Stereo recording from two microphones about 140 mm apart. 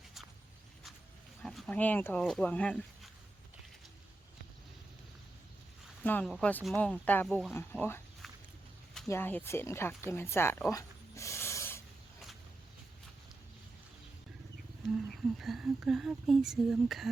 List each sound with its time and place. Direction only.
1.4 s speech: 5° left (ahead or behind)
6.0 s speech: 10° left (ahead or behind)
7.5 s speech: 15° left (ahead or behind)
8.2 s a sound: centre (ahead or behind)
9.0 s speech: 15° left (ahead or behind)
10.7 s a sound: 20° left (ahead or behind)
14.8 s speech: centre (ahead or behind)